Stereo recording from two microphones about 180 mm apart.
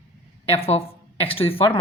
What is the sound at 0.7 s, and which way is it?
Speech, 30° left (ahead or behind).